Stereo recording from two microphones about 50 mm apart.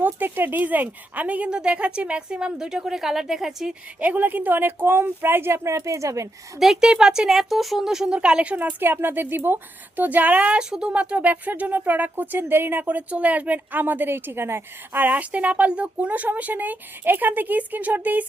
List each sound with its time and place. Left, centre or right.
0.0 s speech: right
1.5 s speech: centre
4.0 s speech: right
5.6 s speech: right
6.6 s speech: centre
8.1 s speech: right
8.8 s speech: right
12.8 s speech: right
15.0 s speech: right